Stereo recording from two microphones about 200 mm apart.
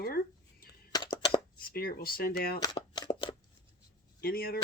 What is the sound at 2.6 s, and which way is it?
Shuffling cards, 20° left (ahead or behind).